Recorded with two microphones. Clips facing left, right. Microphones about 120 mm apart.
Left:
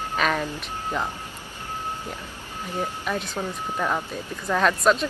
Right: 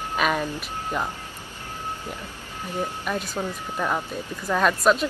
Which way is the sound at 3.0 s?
5° right (ahead or behind).